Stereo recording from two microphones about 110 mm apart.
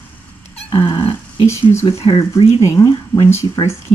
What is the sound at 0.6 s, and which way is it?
Dog, 45° left (ahead or behind).